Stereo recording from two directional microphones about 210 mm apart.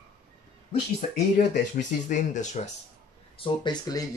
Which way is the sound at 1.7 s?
35° left (ahead or behind).